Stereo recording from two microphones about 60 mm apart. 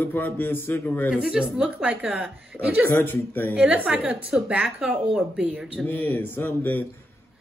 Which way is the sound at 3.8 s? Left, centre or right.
Centre.